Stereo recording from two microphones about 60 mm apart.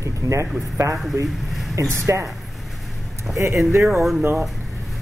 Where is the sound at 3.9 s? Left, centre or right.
Centre.